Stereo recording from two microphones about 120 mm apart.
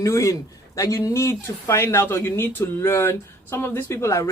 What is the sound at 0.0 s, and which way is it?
Speech, 25° left (ahead or behind).